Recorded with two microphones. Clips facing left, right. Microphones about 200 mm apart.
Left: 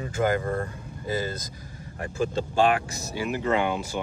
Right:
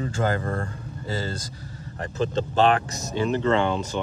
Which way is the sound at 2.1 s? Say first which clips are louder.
Right 2 dB; 10° left (ahead or behind).